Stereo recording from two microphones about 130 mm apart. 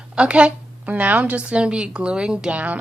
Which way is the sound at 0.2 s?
10° right (ahead or behind).